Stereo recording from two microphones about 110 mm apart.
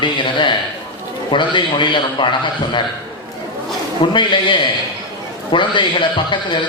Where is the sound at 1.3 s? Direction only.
45° left (ahead or behind).